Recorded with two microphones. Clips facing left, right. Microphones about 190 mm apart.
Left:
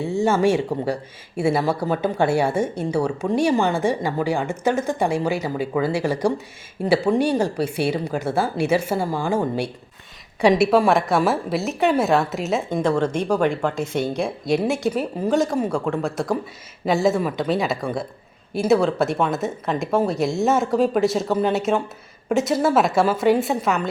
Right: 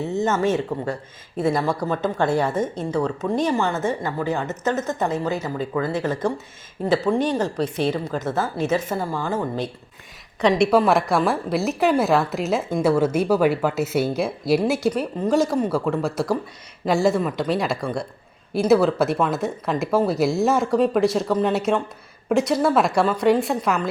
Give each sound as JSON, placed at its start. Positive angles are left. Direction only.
{"t": 0.0, "sound": "speech", "side_deg": 10}
{"t": 10.4, "sound": "a woman's voice", "side_deg": 10}